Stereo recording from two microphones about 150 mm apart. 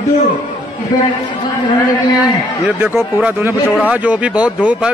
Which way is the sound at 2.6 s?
10° right (ahead or behind).